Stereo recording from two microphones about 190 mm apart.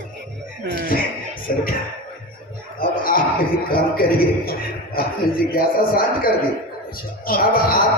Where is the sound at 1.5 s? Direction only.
50° left (ahead or behind).